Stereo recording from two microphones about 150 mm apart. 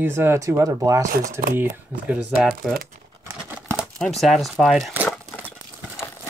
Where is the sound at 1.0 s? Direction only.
65° right (ahead or behind).